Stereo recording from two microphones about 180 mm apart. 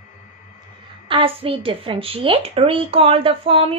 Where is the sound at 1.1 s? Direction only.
30° right (ahead or behind).